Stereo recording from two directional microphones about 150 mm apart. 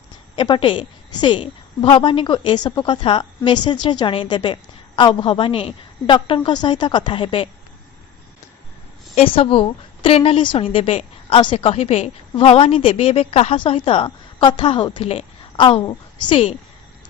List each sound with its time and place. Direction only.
0.3 s a woman's voice: 35° left (ahead or behind)
9.1 s a woman's voice: 40° left (ahead or behind)